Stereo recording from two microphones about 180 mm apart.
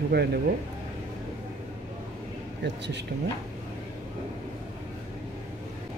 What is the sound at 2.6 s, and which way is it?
Speech, 75° right (ahead or behind).